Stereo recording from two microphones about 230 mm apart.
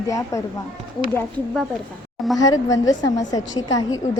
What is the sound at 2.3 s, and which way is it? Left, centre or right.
Speech, centre.